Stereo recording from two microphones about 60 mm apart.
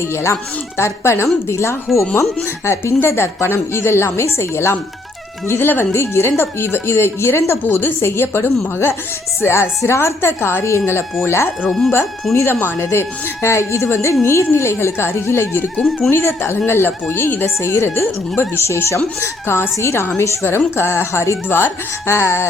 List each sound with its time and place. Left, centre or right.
0.0 s a woman's voice: left
12.5 s speech: left